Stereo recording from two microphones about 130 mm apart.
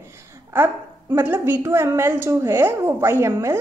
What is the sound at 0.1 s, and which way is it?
A woman's voice, 20° right (ahead or behind).